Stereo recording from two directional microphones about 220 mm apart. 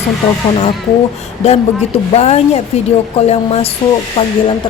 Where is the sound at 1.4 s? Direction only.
30° left (ahead or behind).